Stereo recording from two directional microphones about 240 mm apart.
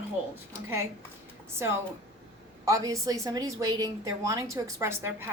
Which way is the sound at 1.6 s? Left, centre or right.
Centre.